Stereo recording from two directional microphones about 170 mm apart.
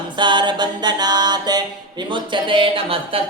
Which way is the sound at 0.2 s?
25° right (ahead or behind).